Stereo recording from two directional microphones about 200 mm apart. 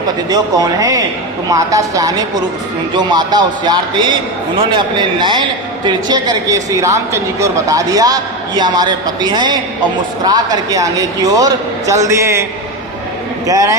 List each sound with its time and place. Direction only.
0.3 s a man's voice: 20° right (ahead or behind)
13.5 s a man's voice: 15° right (ahead or behind)